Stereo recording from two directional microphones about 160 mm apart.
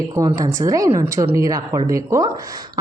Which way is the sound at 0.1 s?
20° right (ahead or behind).